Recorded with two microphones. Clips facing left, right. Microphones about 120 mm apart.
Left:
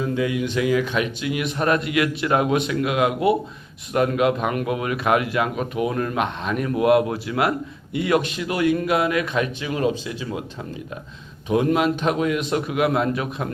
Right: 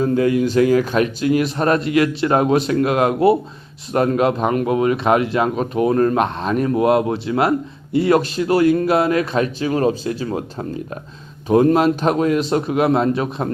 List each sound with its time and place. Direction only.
0.0 s speech: 45° right (ahead or behind)